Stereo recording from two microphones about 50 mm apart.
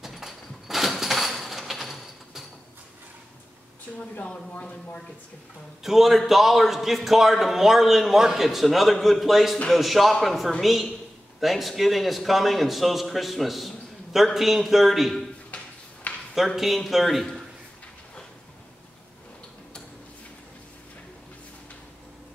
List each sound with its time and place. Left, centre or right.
0.0 s a sound: centre
4.2 s speech: left
5.9 s a man's voice: centre
16.3 s a man's voice: centre